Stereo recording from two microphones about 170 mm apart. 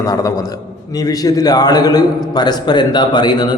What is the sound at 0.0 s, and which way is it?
A man's voice, 20° left (ahead or behind).